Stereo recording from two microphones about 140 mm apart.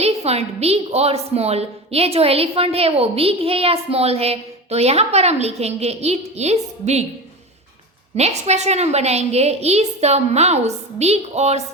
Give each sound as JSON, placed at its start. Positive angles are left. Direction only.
{"t": 0.0, "sound": "a woman's voice", "side_deg": -45}
{"t": 8.1, "sound": "a woman's voice", "side_deg": -50}